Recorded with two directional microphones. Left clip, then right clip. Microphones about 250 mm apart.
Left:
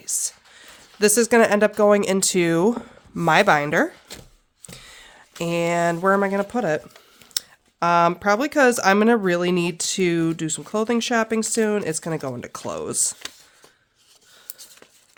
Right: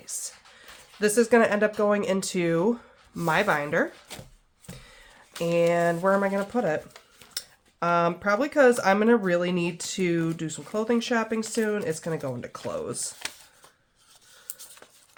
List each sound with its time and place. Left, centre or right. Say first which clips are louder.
0.0 s speech: left 9 dB; left
4.1 s speech: left 2 dB; centre
4.7 s a sound: left 5 dB; left
5.4 s speech: left 1 dB; left